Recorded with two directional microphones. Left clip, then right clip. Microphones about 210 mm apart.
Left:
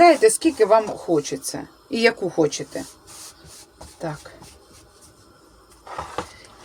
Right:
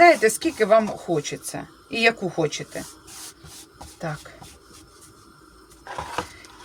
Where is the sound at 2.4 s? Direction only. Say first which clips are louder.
Left 4 dB; 10° left (ahead or behind).